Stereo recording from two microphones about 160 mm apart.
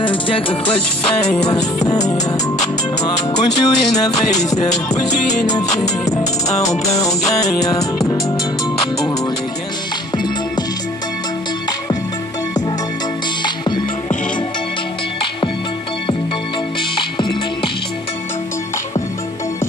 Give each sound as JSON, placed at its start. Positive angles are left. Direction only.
{"t": 0.0, "sound": "speech", "side_deg": 35}
{"t": 1.9, "sound": "music", "side_deg": 25}
{"t": 7.4, "sound": "music", "side_deg": 20}
{"t": 10.1, "sound": "music", "side_deg": 25}
{"t": 13.4, "sound": "music", "side_deg": 30}